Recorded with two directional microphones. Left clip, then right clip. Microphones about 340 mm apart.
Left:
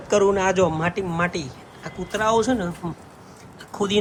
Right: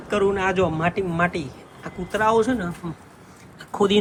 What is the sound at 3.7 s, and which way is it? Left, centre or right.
Speech, centre.